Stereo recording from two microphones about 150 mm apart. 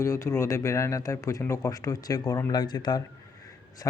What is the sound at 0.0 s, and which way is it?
Speech, 20° left (ahead or behind).